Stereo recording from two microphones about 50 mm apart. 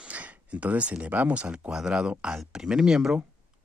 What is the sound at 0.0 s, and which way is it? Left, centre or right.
Speech, right.